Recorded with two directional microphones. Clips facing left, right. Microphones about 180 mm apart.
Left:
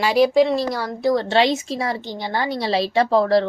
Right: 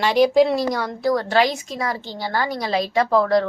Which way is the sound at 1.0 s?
25° left (ahead or behind).